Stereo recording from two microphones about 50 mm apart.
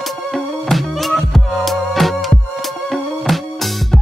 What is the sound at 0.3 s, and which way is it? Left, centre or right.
Music, centre.